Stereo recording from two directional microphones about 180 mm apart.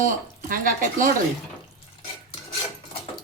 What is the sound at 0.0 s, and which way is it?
Speech, 50° right (ahead or behind).